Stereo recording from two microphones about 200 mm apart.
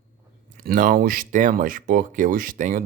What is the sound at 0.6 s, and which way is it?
Speech, 45° right (ahead or behind).